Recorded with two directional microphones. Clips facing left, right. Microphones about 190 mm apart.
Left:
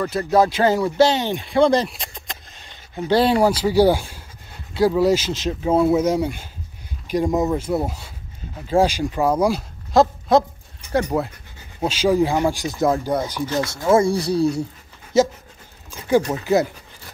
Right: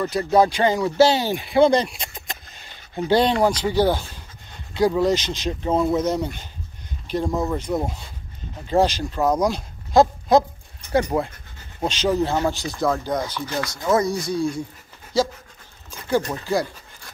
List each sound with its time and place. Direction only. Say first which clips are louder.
0.0 s speech: even; centre (ahead or behind)
0.9 s speech: even; 10° right (ahead or behind); by 7.5 s 15° left (ahead or behind)
7.5 s speech: left 2 dB; 5° left (ahead or behind); by 14.4 s 30° left (ahead or behind)
15.1 s speech: left 5 dB; 20° left (ahead or behind)